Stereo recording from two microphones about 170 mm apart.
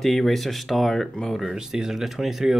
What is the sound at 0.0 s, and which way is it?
Speech, centre (ahead or behind).